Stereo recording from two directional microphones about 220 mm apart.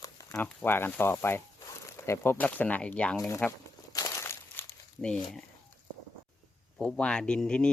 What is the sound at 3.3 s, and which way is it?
Crumpling, 10° left (ahead or behind).